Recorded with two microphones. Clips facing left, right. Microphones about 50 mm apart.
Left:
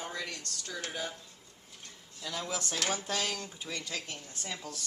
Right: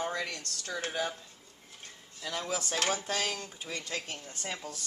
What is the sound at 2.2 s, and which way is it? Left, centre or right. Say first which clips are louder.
Speech: right 2 dB; centre.